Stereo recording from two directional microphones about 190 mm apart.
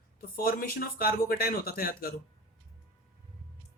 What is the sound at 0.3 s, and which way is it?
Speech, 50° left (ahead or behind).